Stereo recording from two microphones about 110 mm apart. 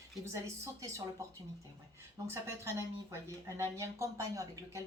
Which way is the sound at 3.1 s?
25° right (ahead or behind).